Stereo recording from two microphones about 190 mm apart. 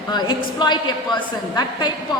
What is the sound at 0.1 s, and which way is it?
A woman's voice, 20° left (ahead or behind).